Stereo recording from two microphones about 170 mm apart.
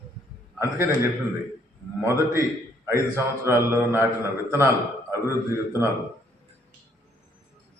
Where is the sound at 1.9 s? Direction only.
15° right (ahead or behind).